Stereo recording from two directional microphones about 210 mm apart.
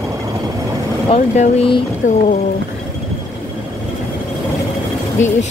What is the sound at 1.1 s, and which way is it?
Speech, 30° left (ahead or behind).